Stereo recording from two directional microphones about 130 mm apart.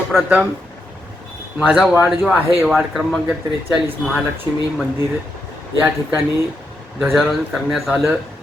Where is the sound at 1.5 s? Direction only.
10° right (ahead or behind).